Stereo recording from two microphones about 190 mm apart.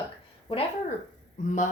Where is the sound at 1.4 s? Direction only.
40° left (ahead or behind).